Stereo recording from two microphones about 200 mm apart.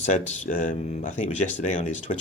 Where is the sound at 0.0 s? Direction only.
40° left (ahead or behind).